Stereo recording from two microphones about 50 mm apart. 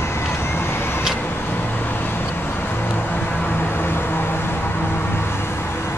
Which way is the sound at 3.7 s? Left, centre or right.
Left.